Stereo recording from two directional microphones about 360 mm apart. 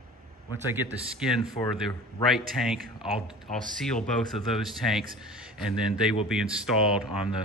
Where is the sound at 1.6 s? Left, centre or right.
Centre.